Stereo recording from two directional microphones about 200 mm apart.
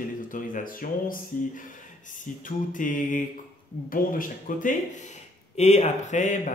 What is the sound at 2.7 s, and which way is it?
Speech, 40° left (ahead or behind).